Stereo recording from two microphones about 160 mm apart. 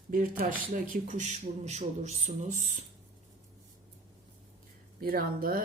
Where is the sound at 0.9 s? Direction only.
50° right (ahead or behind).